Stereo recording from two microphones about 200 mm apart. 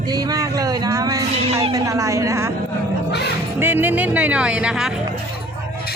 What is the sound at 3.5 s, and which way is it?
Music, 10° right (ahead or behind).